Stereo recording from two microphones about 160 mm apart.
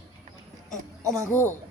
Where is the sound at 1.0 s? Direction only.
20° right (ahead or behind).